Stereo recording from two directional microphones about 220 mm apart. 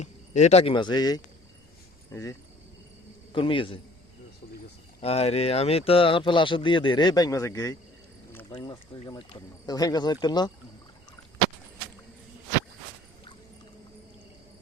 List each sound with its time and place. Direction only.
0.0 s speech: 30° left (ahead or behind)
3.3 s speech: 20° left (ahead or behind)
4.9 s speech: 25° left (ahead or behind)
8.3 s a sound: 10° left (ahead or behind)
8.5 s speech: 20° left (ahead or behind)